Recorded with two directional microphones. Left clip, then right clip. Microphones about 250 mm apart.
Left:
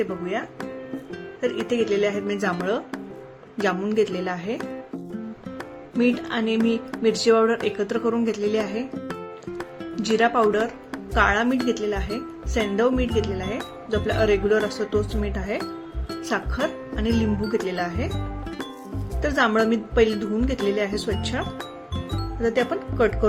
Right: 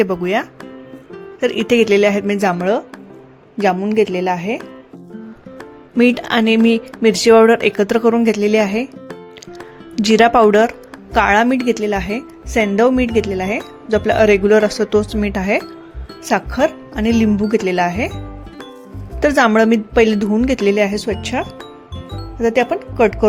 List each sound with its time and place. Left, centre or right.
0.0 s speech: right
1.6 s speech: right
3.6 s a woman's voice: right
6.0 s speech: right
9.9 s a woman's voice: right
19.2 s a woman's voice: right